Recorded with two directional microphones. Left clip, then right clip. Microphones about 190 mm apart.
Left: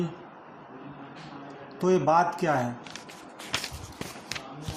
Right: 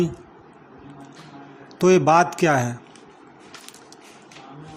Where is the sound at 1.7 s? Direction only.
45° right (ahead or behind).